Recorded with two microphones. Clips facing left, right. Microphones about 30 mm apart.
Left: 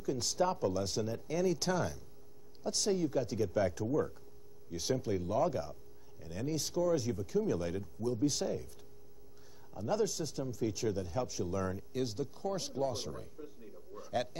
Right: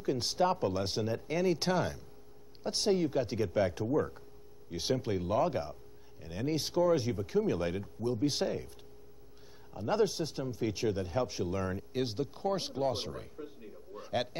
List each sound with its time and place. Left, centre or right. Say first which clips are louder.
0.0 s speech: right 3 dB; right
9.8 s speech: right 3 dB; right
13.9 s a sound: right 2 dB; right